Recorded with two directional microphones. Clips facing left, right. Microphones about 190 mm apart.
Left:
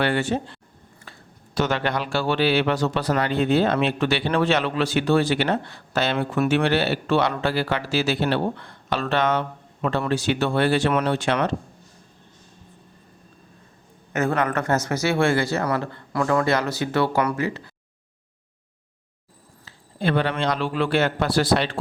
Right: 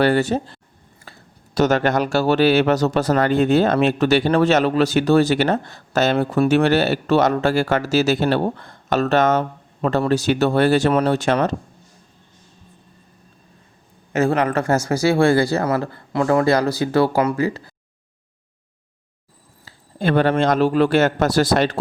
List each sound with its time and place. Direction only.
0.0 s speech: 40° right (ahead or behind)
1.1 s a sound: 35° right (ahead or behind)
1.5 s speech: 40° right (ahead or behind)
14.1 s a man's voice: 25° right (ahead or behind)
19.6 s speech: 45° right (ahead or behind)